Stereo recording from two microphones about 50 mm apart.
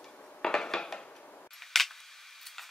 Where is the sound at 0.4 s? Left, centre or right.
Centre.